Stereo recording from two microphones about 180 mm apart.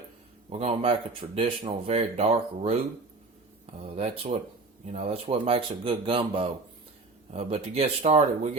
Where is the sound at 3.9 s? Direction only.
35° right (ahead or behind).